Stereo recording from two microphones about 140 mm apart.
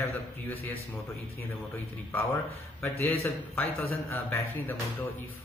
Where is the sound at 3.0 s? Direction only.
20° left (ahead or behind).